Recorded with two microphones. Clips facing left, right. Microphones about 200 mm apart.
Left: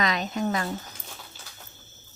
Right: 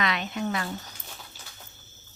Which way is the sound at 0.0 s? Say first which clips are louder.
Left 2 dB; 40° left (ahead or behind).